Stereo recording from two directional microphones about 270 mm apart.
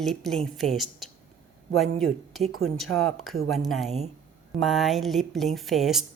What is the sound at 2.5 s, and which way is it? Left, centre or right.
Speech, right.